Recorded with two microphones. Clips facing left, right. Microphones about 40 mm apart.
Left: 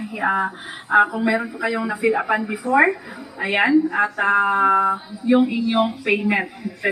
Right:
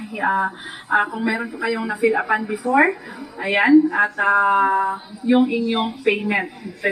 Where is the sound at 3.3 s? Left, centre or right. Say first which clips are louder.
Right 1 dB; centre.